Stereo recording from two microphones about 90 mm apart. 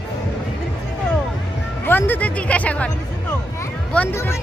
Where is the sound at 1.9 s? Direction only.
20° left (ahead or behind).